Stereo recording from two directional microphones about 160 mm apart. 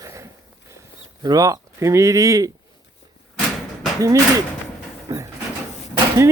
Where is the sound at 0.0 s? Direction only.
20° right (ahead or behind).